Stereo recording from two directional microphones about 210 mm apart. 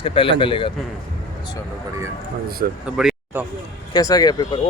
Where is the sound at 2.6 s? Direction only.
45° right (ahead or behind).